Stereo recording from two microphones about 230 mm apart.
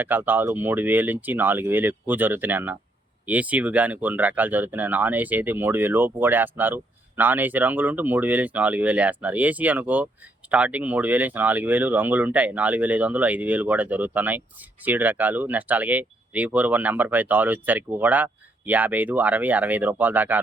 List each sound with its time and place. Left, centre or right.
0.0 s speech: centre